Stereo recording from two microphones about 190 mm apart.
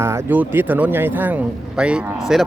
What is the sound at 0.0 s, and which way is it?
Speech, 15° right (ahead or behind).